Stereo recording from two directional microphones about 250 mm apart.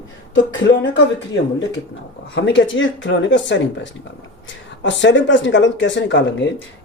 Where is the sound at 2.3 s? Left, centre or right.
Left.